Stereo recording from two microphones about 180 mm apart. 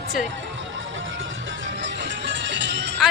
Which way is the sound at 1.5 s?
85° right.